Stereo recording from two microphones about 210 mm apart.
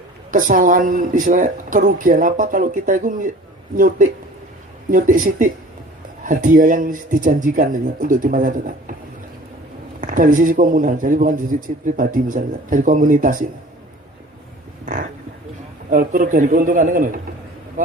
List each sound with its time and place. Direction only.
0.3 s speech: 40° right (ahead or behind)
10.0 s speech: 40° right (ahead or behind)
15.9 s speech: 40° right (ahead or behind)